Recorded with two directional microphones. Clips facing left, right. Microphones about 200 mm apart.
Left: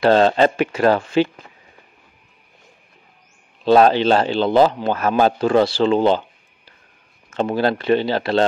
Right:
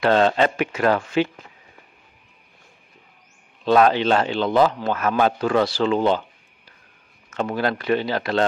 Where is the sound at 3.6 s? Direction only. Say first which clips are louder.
Left 3 dB; 30° left (ahead or behind).